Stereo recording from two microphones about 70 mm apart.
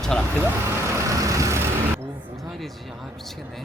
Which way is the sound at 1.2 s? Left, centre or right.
Right.